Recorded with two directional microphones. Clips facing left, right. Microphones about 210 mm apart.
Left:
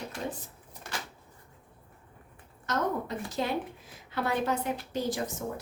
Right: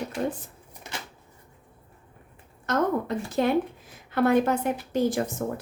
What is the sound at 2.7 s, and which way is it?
A woman's voice, 55° right (ahead or behind).